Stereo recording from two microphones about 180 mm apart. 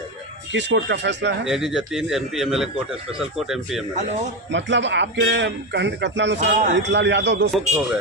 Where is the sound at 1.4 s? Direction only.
Centre (ahead or behind).